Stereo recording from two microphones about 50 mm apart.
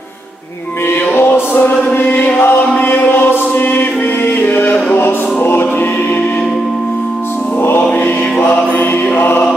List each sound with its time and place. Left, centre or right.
1.1 s music: left
2.0 s choir: left
4.4 s music: left
7.6 s music: left